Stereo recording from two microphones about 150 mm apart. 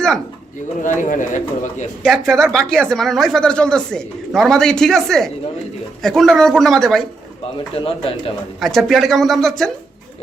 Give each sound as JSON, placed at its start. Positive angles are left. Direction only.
{"t": 0.8, "sound": "speech", "side_deg": 60}
{"t": 2.0, "sound": "speech", "side_deg": 5}
{"t": 7.8, "sound": "speech", "side_deg": 40}
{"t": 8.6, "sound": "speech", "side_deg": 0}